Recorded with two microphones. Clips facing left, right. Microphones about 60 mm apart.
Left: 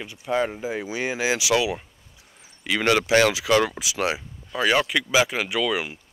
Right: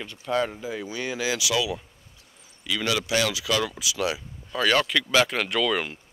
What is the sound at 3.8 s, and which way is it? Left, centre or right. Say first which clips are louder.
Speech: left 2 dB; left.